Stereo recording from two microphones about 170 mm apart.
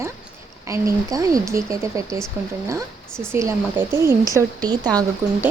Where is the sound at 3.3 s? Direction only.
15° right (ahead or behind).